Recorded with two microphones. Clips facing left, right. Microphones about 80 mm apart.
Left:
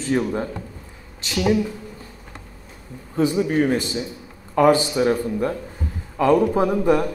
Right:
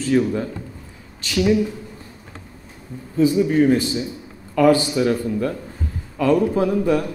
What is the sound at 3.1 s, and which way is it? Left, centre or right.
Speech, left.